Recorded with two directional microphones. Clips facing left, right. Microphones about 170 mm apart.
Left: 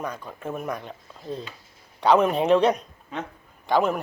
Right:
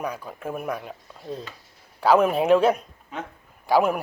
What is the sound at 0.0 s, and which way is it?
A man's voice, 10° right (ahead or behind).